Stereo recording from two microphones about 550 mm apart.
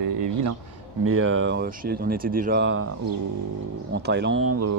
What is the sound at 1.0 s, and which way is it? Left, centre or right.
Speech, right.